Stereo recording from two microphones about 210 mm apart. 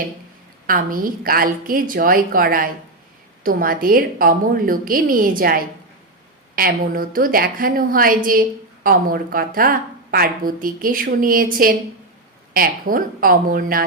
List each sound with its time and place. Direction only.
0.7 s a woman's voice: 40° right (ahead or behind)